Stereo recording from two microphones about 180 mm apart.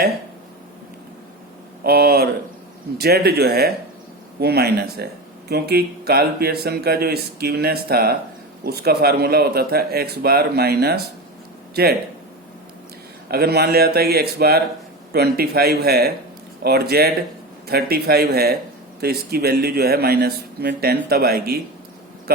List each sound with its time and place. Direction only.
1.8 s speech: 60° right (ahead or behind)
13.3 s speech: 60° right (ahead or behind)